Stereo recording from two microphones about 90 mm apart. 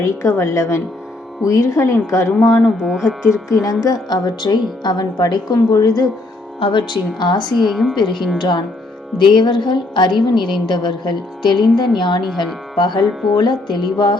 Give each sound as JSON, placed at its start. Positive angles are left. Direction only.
{"t": 0.0, "sound": "speech", "side_deg": 35}
{"t": 2.6, "sound": "music", "side_deg": -5}
{"t": 3.5, "sound": "a woman's voice", "side_deg": 40}
{"t": 6.6, "sound": "a woman's voice", "side_deg": 65}
{"t": 7.7, "sound": "music", "side_deg": 0}
{"t": 8.4, "sound": "a woman's voice", "side_deg": 55}
{"t": 13.0, "sound": "music", "side_deg": 0}
{"t": 13.3, "sound": "a woman's voice", "side_deg": 55}